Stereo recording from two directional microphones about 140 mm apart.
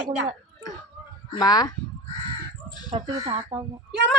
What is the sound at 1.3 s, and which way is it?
Speech, 30° left (ahead or behind).